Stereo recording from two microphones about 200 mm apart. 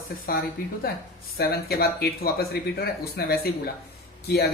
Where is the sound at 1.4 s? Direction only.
50° left (ahead or behind).